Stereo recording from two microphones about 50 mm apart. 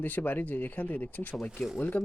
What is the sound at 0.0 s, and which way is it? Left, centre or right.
Speech, left.